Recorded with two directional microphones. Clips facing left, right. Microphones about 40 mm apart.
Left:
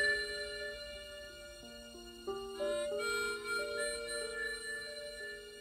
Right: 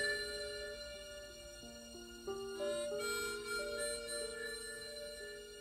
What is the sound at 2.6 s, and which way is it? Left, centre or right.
Music, left.